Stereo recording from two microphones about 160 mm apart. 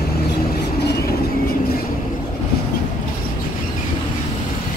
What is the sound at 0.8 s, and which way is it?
Vehicle, 75° left (ahead or behind).